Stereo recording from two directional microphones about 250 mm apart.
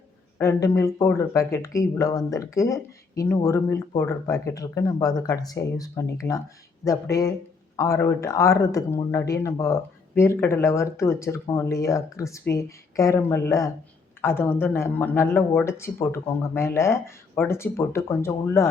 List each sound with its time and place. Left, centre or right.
0.3 s speech: centre